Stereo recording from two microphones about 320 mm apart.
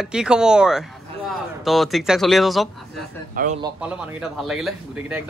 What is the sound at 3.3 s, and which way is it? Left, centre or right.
Speech, right.